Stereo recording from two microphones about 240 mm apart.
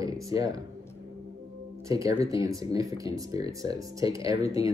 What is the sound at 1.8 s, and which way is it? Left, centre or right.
Speech, centre.